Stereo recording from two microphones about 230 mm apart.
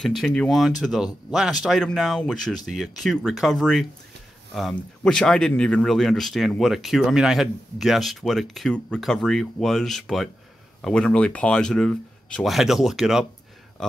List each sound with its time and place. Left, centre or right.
0.0 s speech: centre